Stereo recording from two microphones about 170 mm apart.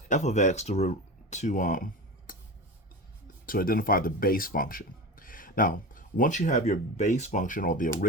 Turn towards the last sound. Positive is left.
turn(degrees=50)  # may be behind; listen again after turning